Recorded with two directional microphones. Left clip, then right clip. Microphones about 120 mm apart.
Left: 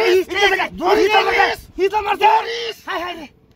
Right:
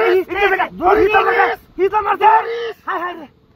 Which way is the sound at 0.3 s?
20° left (ahead or behind).